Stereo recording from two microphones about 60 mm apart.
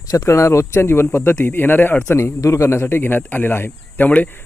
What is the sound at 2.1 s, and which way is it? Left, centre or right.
Speech, left.